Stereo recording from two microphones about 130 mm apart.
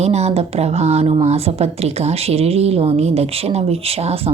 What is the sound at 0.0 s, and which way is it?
Speech, 55° right (ahead or behind).